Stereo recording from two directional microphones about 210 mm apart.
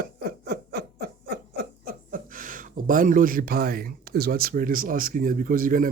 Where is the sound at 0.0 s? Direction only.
45° right (ahead or behind).